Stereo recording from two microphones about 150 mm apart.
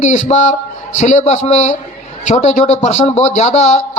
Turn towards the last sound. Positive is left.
turn(degrees=50)  # may be behind; listen again after turning